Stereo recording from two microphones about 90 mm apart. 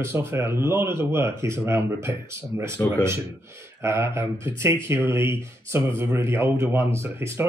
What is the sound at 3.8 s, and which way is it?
Speech, 25° right (ahead or behind).